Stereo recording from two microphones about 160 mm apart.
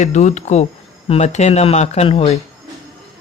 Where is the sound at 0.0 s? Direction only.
45° left (ahead or behind).